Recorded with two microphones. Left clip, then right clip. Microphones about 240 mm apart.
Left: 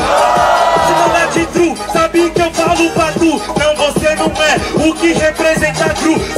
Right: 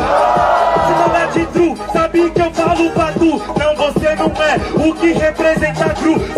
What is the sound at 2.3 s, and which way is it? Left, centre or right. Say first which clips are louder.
Music: left 2 dB; centre.